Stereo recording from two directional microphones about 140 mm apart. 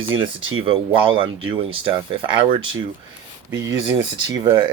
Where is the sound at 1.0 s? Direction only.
40° right (ahead or behind).